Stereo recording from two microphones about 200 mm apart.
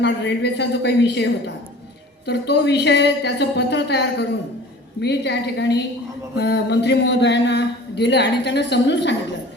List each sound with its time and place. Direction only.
0.0 s speech: 60° left (ahead or behind)